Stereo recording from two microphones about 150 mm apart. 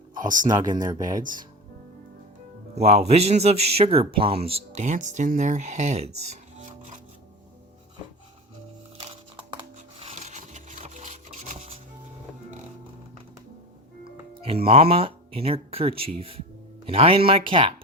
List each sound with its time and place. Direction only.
0.4 s speech: 25° right (ahead or behind)
1.2 s speech: 65° right (ahead or behind)
2.7 s speech: 45° right (ahead or behind)
9.3 s music: 30° right (ahead or behind)
10.1 s wood: 50° right (ahead or behind)
14.0 s speech: 40° right (ahead or behind)